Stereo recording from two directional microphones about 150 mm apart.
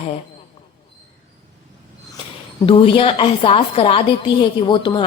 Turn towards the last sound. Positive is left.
turn(degrees=30)  # may be behind; listen again after turning